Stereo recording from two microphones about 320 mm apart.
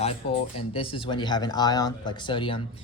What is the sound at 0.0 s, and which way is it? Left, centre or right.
Speech, centre.